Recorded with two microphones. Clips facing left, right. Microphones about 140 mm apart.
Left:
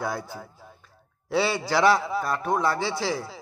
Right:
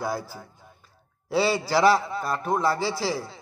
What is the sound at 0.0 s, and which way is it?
A man's voice, 5° right (ahead or behind).